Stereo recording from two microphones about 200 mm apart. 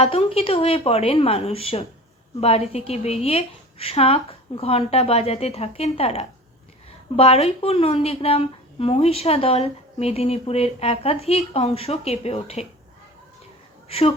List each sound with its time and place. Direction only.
0.0 s a woman's voice: 30° left (ahead or behind)
13.8 s speech: 30° left (ahead or behind)